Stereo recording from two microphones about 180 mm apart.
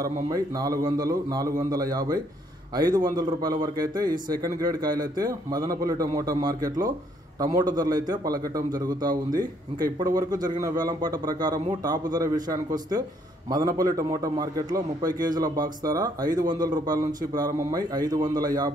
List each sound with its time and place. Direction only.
0.0 s a man's voice: 20° right (ahead or behind)